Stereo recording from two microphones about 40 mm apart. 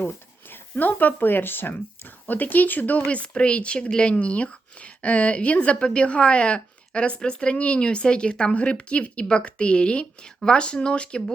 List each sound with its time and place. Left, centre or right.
0.5 s speech: left
2.2 s speech: left
3.1 s speech: left